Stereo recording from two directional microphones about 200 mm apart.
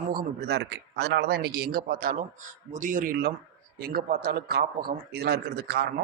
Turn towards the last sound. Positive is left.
turn(degrees=-55)  # may be behind; listen again after turning